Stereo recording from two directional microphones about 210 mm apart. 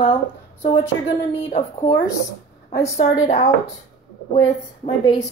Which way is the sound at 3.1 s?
15° left (ahead or behind).